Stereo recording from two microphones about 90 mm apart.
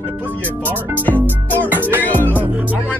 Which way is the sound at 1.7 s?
20° right (ahead or behind).